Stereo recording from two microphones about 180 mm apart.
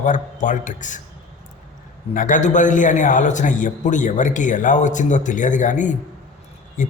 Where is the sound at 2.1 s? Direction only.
45° left (ahead or behind).